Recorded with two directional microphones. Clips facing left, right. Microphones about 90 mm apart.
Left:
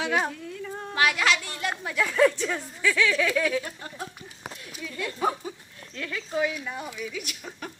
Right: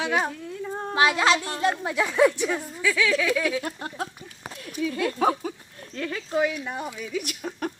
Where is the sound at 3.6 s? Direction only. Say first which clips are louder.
Right 5 dB; 60° right (ahead or behind).